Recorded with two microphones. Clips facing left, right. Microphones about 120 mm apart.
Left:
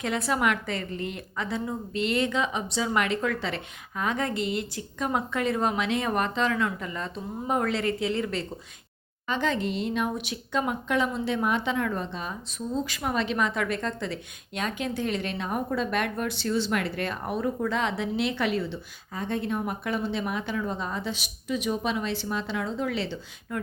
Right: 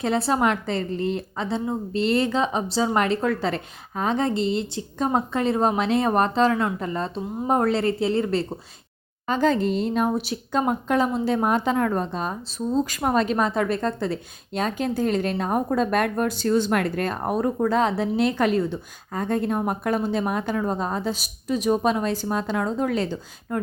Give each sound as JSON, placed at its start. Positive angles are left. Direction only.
{"t": 0.0, "sound": "a woman's voice", "side_deg": -30}